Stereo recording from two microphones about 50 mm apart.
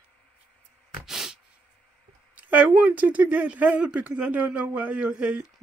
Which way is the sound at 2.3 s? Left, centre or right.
Right.